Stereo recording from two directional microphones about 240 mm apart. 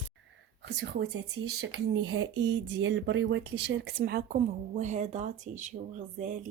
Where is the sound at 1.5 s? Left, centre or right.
Right.